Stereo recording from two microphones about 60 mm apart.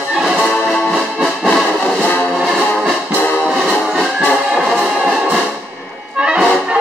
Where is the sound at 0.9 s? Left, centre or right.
Centre.